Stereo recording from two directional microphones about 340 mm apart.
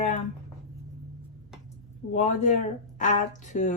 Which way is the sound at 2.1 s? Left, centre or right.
Centre.